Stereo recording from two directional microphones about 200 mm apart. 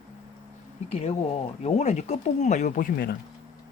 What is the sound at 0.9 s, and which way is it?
Speech, 30° left (ahead or behind).